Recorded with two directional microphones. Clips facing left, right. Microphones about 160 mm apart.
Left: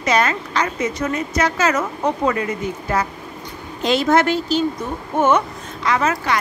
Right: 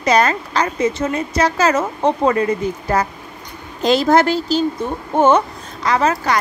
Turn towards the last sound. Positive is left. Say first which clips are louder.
# right 2 dB
turn(degrees=-35)  # may be behind; listen again after turning